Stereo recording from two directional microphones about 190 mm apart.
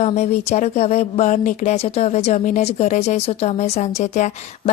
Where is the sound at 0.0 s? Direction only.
35° left (ahead or behind).